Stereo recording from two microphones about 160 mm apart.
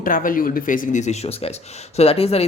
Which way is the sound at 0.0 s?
60° left (ahead or behind).